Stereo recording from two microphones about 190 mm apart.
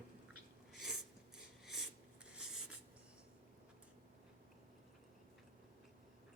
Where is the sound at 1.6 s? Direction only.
Centre (ahead or behind).